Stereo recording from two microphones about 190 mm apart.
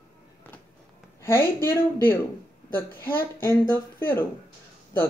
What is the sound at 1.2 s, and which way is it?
Speech, 15° left (ahead or behind).